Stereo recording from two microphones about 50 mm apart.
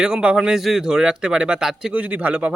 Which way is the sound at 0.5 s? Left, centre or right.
Centre.